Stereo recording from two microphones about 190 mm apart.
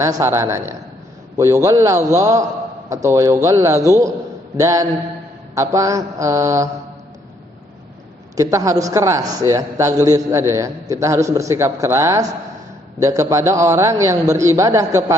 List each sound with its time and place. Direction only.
0.0 s a man's voice: 15° right (ahead or behind)
8.4 s a man's voice: 15° right (ahead or behind)